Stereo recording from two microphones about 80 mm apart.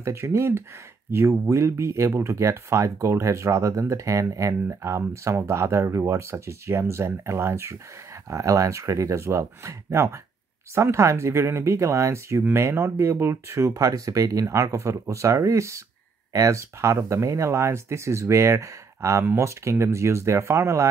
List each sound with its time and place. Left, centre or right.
0.0 s speech: right